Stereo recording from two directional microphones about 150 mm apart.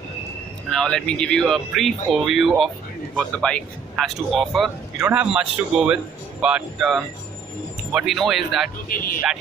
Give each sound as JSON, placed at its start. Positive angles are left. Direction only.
{"t": 0.7, "sound": "speech", "side_deg": 5}
{"t": 8.8, "sound": "speech", "side_deg": 70}